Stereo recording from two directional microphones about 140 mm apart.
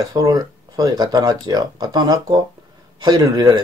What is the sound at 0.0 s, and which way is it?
Speech, 25° right (ahead or behind).